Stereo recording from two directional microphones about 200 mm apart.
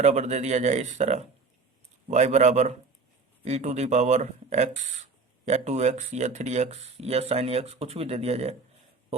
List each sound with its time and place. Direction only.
0.0 s speech: 35° right (ahead or behind)